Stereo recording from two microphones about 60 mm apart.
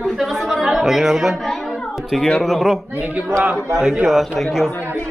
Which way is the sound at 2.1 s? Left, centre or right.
Centre.